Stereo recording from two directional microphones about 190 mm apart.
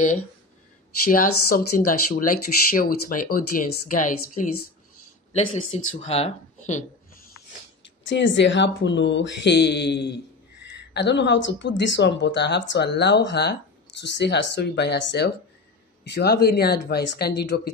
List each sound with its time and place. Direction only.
1.0 s speech: 50° left (ahead or behind)
5.9 s speech: 30° left (ahead or behind)
8.1 s speech: 70° left (ahead or behind)